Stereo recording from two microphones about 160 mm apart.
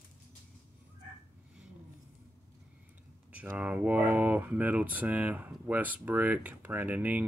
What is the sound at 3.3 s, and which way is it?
Speech, 10° right (ahead or behind).